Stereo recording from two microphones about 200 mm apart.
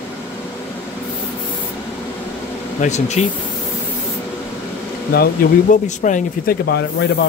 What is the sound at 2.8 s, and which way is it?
Speech, 35° left (ahead or behind).